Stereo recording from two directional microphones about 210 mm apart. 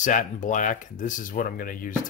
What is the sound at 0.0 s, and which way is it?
Speech, 35° left (ahead or behind).